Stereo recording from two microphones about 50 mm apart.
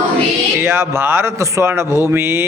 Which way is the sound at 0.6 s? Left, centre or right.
Right.